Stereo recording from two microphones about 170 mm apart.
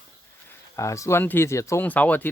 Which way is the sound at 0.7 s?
20° left (ahead or behind).